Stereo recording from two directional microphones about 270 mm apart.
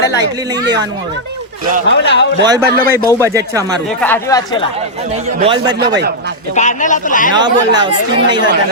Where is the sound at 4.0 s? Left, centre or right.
Centre.